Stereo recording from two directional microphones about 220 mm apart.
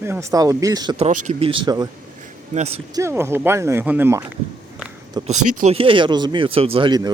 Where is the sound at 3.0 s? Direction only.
10° right (ahead or behind).